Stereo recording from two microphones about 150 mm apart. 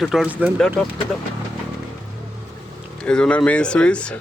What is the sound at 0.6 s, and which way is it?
Speech, 5° left (ahead or behind).